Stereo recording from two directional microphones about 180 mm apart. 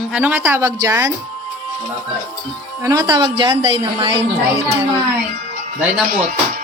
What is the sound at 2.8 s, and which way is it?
A woman's voice, 20° right (ahead or behind).